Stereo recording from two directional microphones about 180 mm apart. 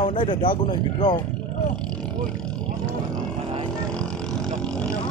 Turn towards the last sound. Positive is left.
turn(degrees=5)  # may be behind; listen again after turning